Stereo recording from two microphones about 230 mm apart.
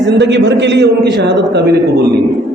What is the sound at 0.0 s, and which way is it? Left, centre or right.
A man's voice, right.